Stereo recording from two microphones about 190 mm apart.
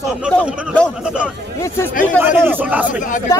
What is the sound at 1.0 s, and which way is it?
A man's voice, 5° right (ahead or behind).